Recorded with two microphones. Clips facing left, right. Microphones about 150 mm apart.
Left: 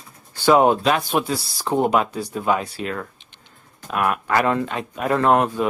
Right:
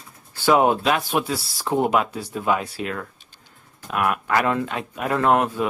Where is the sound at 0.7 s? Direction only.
5° right (ahead or behind).